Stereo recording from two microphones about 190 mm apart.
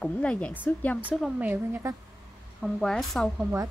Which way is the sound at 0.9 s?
5° right (ahead or behind).